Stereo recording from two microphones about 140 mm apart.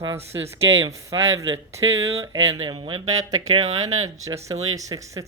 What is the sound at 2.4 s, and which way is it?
Speech, 25° right (ahead or behind).